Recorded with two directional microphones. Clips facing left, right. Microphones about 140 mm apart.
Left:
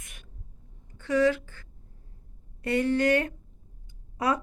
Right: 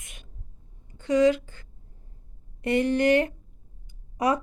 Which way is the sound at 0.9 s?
20° right (ahead or behind).